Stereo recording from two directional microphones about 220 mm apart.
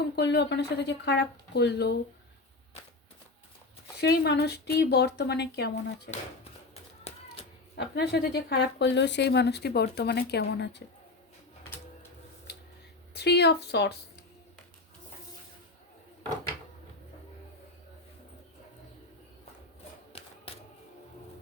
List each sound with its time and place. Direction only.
0.2 s speech: 50° left (ahead or behind)
4.0 s speech: 50° left (ahead or behind)
7.8 s speech: 45° left (ahead or behind)
13.1 s speech: 50° left (ahead or behind)
20.1 s typewriter: 25° left (ahead or behind)